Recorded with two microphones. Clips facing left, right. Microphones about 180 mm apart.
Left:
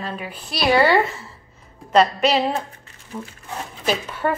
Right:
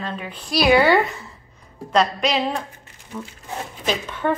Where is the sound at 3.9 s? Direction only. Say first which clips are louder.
Even; 5° left (ahead or behind).